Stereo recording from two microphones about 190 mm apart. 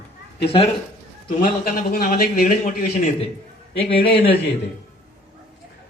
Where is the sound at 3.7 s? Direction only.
30° left (ahead or behind).